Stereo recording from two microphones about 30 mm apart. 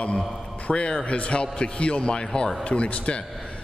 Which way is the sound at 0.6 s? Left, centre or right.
Left.